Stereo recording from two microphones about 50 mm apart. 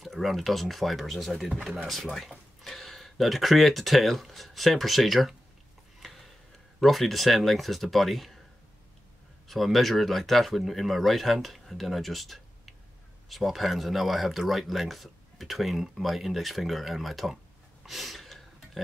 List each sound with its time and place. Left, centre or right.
0.0 s speech: centre
9.5 s speech: centre
17.8 s gasp: centre